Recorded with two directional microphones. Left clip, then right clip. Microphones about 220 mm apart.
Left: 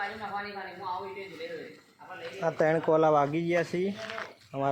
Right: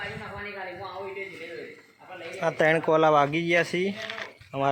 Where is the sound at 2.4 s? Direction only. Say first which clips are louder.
Right 3 dB; centre (ahead or behind).